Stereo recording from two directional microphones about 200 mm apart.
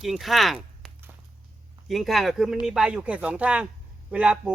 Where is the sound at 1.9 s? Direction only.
Centre (ahead or behind).